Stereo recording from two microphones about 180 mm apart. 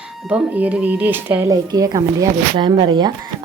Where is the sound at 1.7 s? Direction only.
20° right (ahead or behind).